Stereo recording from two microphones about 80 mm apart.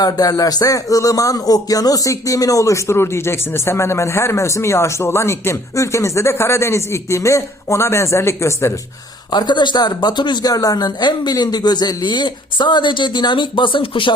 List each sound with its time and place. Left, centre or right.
0.0 s speech: left
9.3 s speech: left
10.5 s speech: left